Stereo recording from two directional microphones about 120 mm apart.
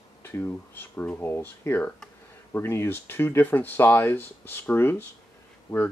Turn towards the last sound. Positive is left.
turn(degrees=45)  # may be behind; listen again after turning